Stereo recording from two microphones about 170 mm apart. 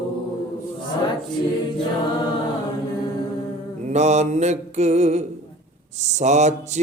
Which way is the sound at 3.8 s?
40° right (ahead or behind).